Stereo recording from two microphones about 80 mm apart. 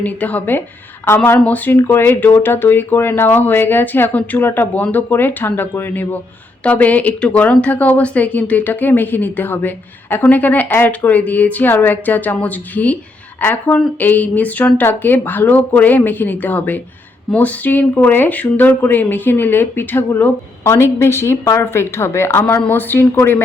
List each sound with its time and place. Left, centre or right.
0.0 s speech: left